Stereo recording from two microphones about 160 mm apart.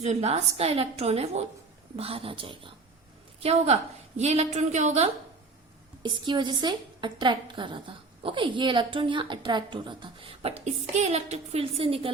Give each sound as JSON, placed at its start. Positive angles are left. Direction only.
{"t": 0.0, "sound": "a woman's voice", "side_deg": -45}
{"t": 6.0, "sound": "a woman's voice", "side_deg": -30}